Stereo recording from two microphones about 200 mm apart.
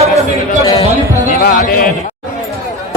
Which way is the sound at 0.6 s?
15° left (ahead or behind).